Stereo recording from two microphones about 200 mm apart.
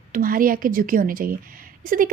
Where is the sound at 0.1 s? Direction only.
45° right (ahead or behind).